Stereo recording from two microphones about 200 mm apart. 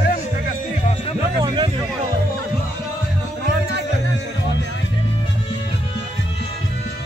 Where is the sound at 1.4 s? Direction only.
20° right (ahead or behind).